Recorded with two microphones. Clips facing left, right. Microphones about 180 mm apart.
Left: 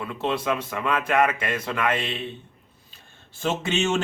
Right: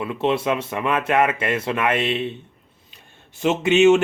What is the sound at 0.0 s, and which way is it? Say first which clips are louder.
Speech: right 5 dB; 20° right (ahead or behind).